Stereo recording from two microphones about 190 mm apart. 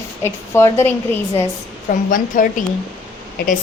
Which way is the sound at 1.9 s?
45° left (ahead or behind).